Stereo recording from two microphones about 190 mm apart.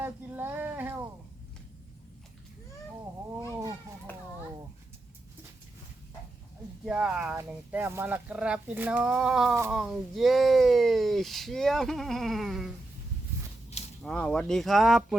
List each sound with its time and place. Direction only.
0.0 s a sound: 10° right (ahead or behind)
3.5 s children playing: 20° right (ahead or behind)
4.1 s children playing: 10° left (ahead or behind)
6.8 s speech: 5° right (ahead or behind)
14.0 s speech: 5° left (ahead or behind)